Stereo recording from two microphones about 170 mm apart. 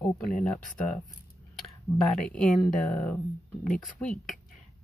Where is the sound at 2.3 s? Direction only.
5° left (ahead or behind).